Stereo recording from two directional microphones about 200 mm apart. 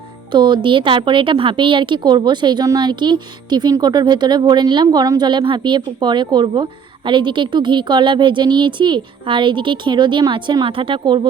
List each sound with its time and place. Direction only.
0.3 s a woman's voice: 25° right (ahead or behind)